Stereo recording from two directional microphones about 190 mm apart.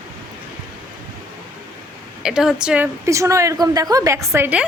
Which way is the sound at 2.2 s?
5° right (ahead or behind).